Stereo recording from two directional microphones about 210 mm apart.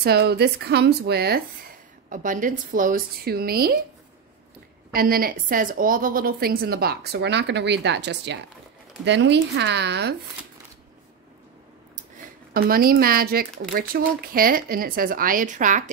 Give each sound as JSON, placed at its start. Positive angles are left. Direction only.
{"t": 0.0, "sound": "a woman's voice", "side_deg": -50}
{"t": 4.9, "sound": "a woman's voice", "side_deg": -45}
{"t": 12.5, "sound": "a woman's voice", "side_deg": -45}